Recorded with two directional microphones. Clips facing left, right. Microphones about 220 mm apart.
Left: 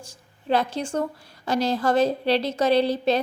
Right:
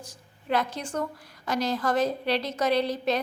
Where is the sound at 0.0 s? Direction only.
30° left (ahead or behind).